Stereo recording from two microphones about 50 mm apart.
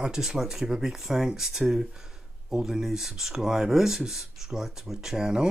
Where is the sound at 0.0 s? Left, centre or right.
Centre.